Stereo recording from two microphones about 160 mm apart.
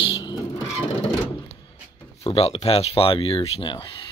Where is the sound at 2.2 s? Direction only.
35° left (ahead or behind).